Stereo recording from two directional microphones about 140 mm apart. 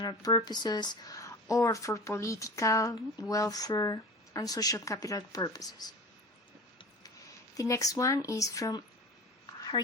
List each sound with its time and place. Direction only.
0.0 s speech: 30° left (ahead or behind)
7.5 s speech: 25° left (ahead or behind)
9.6 s a sound: 30° left (ahead or behind)